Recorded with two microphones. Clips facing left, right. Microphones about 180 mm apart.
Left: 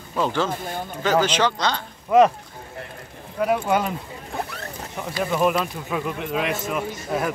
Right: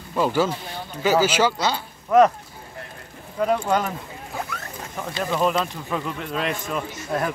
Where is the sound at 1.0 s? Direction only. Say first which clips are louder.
Right 1 dB; 5° right (ahead or behind).